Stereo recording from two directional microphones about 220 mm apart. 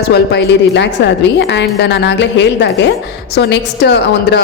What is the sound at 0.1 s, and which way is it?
A woman's voice, 50° left (ahead or behind).